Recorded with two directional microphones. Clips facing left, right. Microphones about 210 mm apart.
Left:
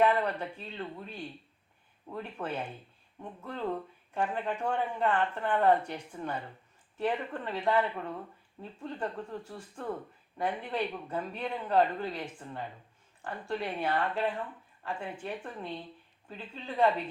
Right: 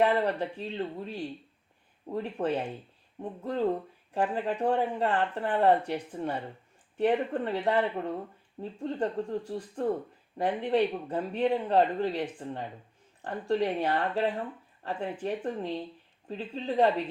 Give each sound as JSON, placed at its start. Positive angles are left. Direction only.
{"t": 0.0, "sound": "speech", "side_deg": -30}